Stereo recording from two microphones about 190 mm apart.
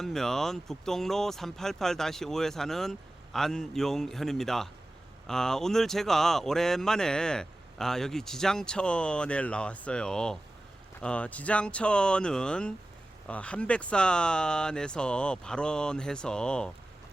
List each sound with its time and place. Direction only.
0.0 s speech: centre (ahead or behind)